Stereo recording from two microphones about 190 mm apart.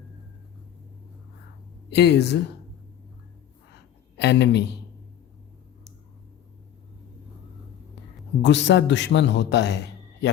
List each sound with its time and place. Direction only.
1.9 s speech: 60° left (ahead or behind)
3.7 s a sound: 60° left (ahead or behind)
8.4 s speech: 65° left (ahead or behind)